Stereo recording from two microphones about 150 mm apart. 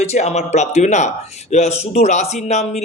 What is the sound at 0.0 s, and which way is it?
Speech, 45° left (ahead or behind).